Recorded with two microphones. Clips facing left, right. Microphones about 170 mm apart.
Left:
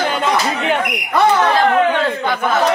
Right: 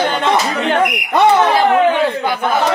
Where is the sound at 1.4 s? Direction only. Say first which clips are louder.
Right 2 dB; 15° right (ahead or behind).